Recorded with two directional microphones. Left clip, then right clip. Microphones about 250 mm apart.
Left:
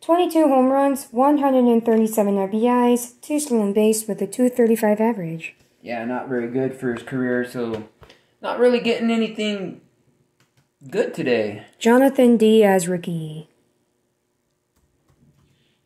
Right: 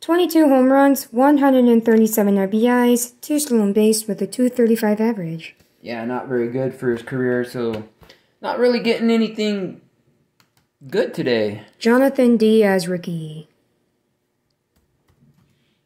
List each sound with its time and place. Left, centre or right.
0.0 s speech: right; by 5.4 s centre
5.8 s speech: right
11.2 s speech: right
11.8 s a woman's voice: centre